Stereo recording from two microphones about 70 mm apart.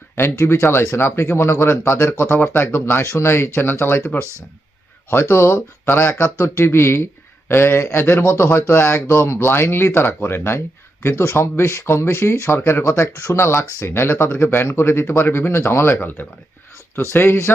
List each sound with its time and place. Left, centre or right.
0.2 s speech: left